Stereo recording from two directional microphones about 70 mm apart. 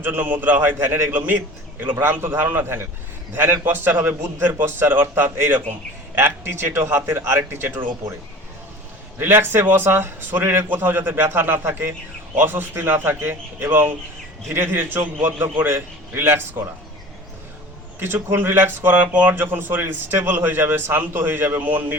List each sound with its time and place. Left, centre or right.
0.0 s a man's voice: right
1.1 s a man's voice: right
9.1 s a man's voice: right
18.0 s a man's voice: right